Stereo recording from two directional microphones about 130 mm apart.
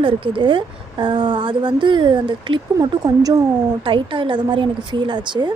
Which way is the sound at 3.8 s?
40° right (ahead or behind).